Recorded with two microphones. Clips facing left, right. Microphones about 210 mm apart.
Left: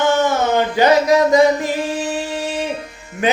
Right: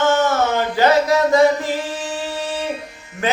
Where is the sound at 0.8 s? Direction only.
15° left (ahead or behind).